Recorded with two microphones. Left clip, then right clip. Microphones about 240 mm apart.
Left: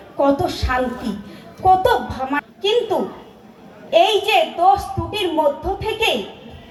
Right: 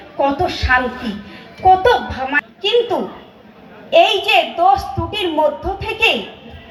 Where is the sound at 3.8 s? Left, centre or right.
Centre.